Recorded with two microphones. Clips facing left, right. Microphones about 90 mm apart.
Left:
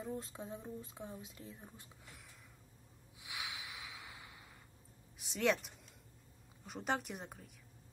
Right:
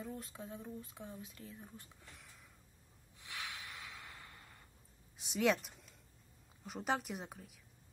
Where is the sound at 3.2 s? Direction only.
10° left (ahead or behind).